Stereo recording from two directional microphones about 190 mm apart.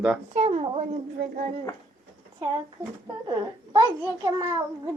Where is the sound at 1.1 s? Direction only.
45° right (ahead or behind).